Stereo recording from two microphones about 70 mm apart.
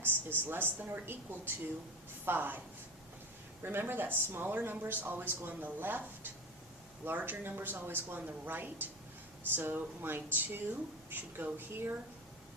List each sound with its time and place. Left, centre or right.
0.0 s speech: right
3.6 s speech: right
7.0 s speech: right